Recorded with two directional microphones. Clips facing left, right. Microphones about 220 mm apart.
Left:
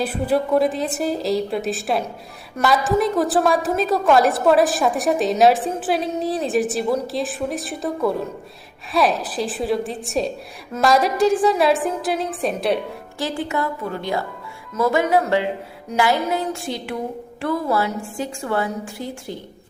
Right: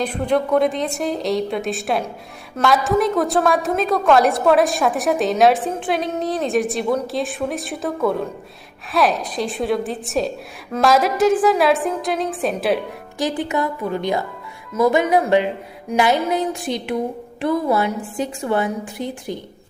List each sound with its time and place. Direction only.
0.0 s a woman's voice: 5° left (ahead or behind)
13.1 s a woman's voice: 15° right (ahead or behind)